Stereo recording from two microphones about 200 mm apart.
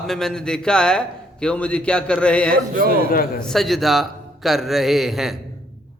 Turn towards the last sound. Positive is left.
turn(degrees=0)  # may be behind; listen again after turning